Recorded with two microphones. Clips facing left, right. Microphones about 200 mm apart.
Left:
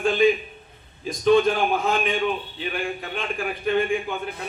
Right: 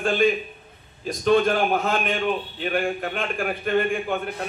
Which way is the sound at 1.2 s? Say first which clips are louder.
Left 1 dB; 55° right (ahead or behind).